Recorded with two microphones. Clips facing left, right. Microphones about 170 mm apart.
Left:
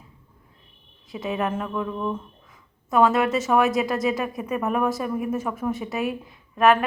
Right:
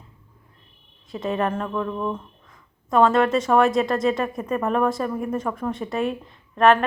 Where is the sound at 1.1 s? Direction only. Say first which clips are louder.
Right 2 dB; centre (ahead or behind).